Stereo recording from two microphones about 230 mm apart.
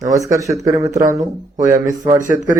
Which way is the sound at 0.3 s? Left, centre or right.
Centre.